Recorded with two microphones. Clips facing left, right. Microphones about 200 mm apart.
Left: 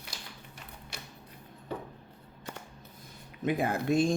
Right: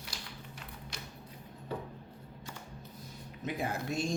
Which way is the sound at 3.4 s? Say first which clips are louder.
Left 7 dB; 55° left (ahead or behind).